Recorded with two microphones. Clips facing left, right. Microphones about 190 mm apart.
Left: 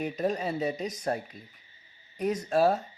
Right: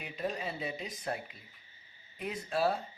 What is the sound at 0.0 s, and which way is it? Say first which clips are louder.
A man's voice: left 8 dB; 45° left (ahead or behind).